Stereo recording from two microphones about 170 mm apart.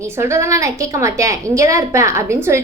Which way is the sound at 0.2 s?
15° right (ahead or behind).